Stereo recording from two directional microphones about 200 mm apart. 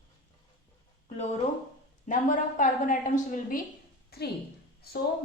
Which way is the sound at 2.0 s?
40° left (ahead or behind).